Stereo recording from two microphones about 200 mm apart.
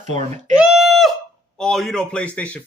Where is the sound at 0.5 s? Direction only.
5° right (ahead or behind).